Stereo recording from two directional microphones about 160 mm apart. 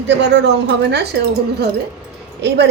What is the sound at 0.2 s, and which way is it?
Speech, 90° right.